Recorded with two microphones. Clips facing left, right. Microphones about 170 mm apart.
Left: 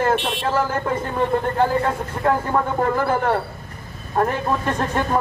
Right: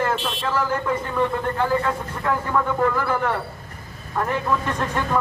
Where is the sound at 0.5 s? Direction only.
45° left (ahead or behind).